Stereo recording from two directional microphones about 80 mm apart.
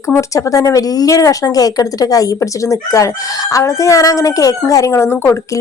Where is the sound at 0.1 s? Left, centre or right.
Left.